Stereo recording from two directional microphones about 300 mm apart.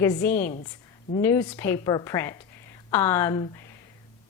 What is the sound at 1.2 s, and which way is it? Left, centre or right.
A woman's voice, centre.